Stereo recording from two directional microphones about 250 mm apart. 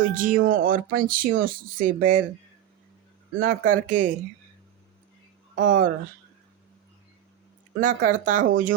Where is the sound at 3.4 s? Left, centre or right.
Right.